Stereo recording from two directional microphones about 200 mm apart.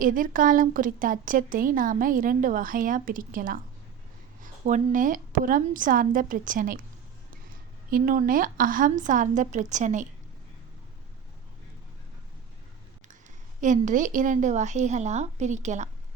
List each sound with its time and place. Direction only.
0.0 s a woman's voice: 45° right (ahead or behind)
4.6 s a woman's voice: 40° right (ahead or behind)
7.9 s a woman's voice: 45° right (ahead or behind)
13.6 s a woman's voice: 40° right (ahead or behind)